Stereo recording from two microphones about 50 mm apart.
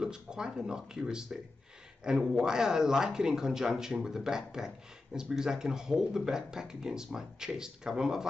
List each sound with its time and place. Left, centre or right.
0.0 s speech: centre